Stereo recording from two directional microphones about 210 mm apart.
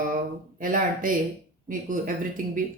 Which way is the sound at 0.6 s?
40° right (ahead or behind).